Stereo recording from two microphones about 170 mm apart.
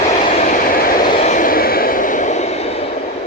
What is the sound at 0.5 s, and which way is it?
Vehicle, 55° left (ahead or behind).